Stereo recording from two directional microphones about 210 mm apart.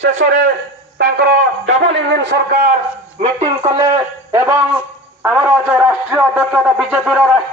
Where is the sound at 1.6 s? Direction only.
60° right (ahead or behind); by 2.7 s 45° right (ahead or behind).